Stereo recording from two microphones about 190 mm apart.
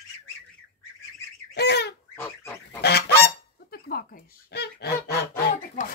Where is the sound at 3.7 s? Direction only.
55° left (ahead or behind).